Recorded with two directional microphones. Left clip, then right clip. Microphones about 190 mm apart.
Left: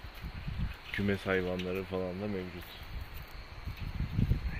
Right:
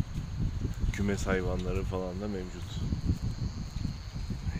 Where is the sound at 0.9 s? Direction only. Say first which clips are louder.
Even; 20° right (ahead or behind).